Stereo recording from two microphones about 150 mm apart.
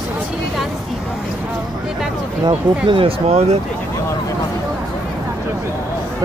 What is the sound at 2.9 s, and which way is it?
Speech, 35° right (ahead or behind).